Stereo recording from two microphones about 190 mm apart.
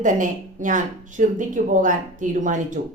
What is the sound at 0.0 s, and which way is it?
A woman's voice, 40° right (ahead or behind).